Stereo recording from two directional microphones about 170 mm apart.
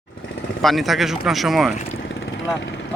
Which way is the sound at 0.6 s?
Centre (ahead or behind).